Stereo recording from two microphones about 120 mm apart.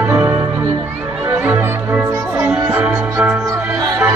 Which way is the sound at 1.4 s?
15° right (ahead or behind).